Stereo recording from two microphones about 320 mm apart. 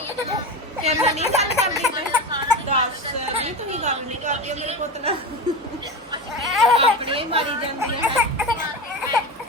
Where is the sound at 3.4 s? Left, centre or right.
Right.